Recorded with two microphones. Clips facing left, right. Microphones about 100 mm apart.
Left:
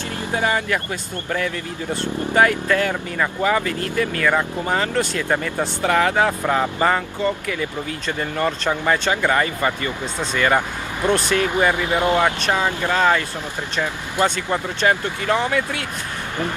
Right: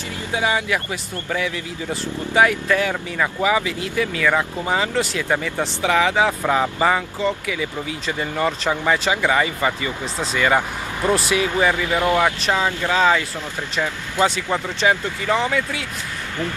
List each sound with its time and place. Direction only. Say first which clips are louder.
0.3 s speech: even; 10° right (ahead or behind)
11.7 s speech: even; 20° left (ahead or behind)
12.9 s speech: right 1 dB; 10° right (ahead or behind)
14.8 s speech: even; centre (ahead or behind)